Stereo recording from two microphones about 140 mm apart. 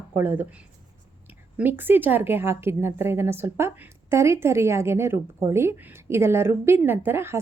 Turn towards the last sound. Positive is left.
turn(degrees=-15)  # may be behind; listen again after turning